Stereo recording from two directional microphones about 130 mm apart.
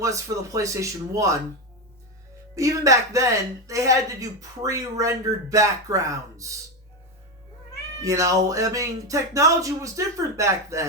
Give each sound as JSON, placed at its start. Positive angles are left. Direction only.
{"t": 0.0, "sound": "speech", "side_deg": -25}
{"t": 2.6, "sound": "speech", "side_deg": -25}
{"t": 8.0, "sound": "speech", "side_deg": -25}